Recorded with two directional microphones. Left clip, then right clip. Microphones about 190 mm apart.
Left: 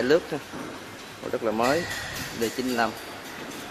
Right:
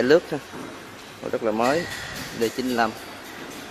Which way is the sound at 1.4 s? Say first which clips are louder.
Right 2 dB; 20° right (ahead or behind).